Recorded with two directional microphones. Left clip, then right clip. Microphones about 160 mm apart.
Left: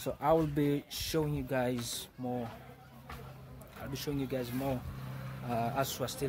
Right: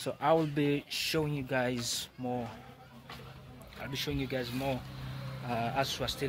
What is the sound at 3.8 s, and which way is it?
A man's voice, 5° left (ahead or behind).